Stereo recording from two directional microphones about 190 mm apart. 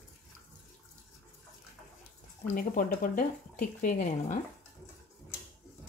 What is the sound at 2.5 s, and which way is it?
Speech, 45° left (ahead or behind).